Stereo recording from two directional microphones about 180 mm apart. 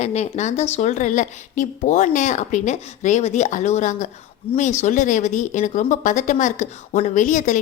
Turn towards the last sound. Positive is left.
turn(degrees=45)  # may be behind; listen again after turning